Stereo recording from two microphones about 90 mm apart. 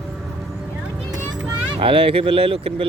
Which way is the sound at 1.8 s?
80° right.